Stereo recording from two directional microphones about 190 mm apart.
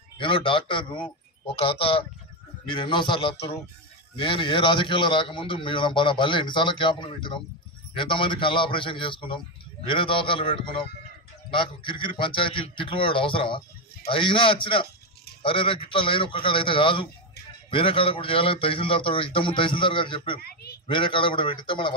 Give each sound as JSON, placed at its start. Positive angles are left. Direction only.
{"t": 0.2, "sound": "a man's voice", "side_deg": 25}
{"t": 20.4, "sound": "speech", "side_deg": 55}
{"t": 20.8, "sound": "a man's voice", "side_deg": 25}